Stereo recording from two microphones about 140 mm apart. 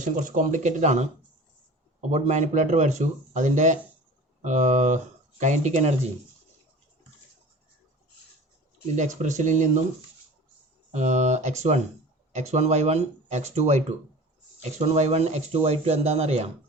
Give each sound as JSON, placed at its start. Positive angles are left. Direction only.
{"t": 0.0, "sound": "speech", "side_deg": -65}
{"t": 9.0, "sound": "speech", "side_deg": -60}
{"t": 10.9, "sound": "speech", "side_deg": -55}